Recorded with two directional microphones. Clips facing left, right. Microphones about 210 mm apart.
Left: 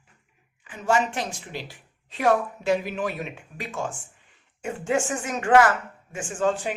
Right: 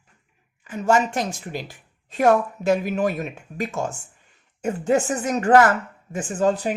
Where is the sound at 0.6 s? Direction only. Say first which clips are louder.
Right 4 dB; 40° right (ahead or behind).